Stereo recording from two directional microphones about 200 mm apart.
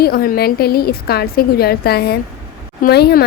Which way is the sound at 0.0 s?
50° left (ahead or behind).